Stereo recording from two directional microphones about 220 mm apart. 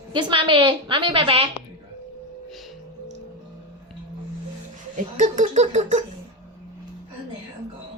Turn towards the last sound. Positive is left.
turn(degrees=-30)  # may be behind; listen again after turning